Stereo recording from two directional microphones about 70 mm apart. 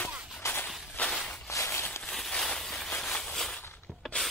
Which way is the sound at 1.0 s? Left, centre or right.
Centre.